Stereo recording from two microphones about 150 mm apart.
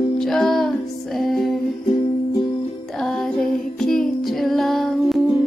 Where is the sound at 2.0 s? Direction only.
35° left (ahead or behind).